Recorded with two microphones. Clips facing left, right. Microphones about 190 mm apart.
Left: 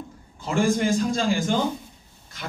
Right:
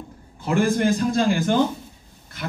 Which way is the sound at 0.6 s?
60° right (ahead or behind).